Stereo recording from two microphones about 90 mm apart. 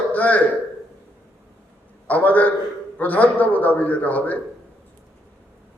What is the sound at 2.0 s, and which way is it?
A man's voice, 20° left (ahead or behind).